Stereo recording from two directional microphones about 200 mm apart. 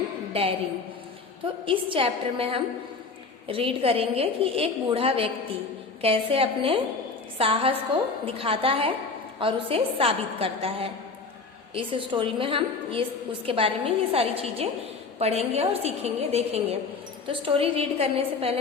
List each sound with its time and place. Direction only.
0.4 s a woman's voice: 30° right (ahead or behind)
1.6 s a woman's voice: 25° right (ahead or behind)